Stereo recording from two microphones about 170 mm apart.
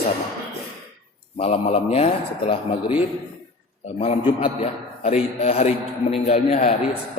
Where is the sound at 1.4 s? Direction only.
35° left (ahead or behind).